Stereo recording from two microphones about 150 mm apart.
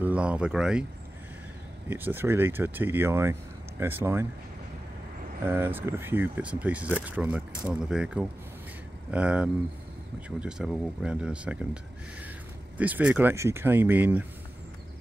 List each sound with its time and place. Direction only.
0.0 s speech: 10° right (ahead or behind)
1.9 s speech: 15° right (ahead or behind)
5.5 s speech: 15° right (ahead or behind)